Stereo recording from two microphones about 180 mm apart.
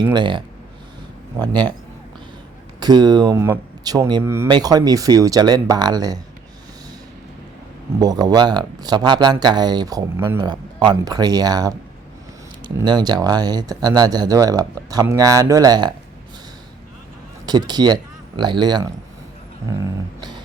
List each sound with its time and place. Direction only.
0.0 s speech: 25° right (ahead or behind)
2.8 s speech: 25° right (ahead or behind)
7.9 s speech: 20° right (ahead or behind)
17.4 s speech: 20° right (ahead or behind)